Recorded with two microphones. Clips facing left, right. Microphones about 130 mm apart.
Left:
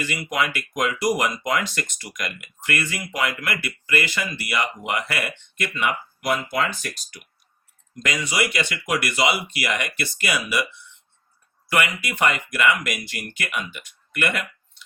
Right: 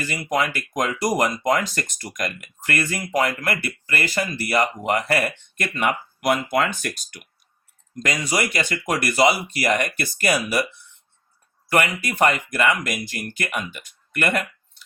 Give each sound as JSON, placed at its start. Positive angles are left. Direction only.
{"t": 0.0, "sound": "speech", "side_deg": -40}
{"t": 7.9, "sound": "speech", "side_deg": -40}
{"t": 11.7, "sound": "speech", "side_deg": -40}